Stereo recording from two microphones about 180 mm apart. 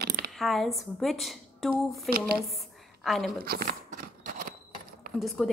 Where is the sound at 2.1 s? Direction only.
55° right (ahead or behind).